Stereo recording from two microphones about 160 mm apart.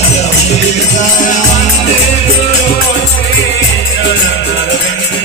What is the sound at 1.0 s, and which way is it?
Music, 50° left (ahead or behind).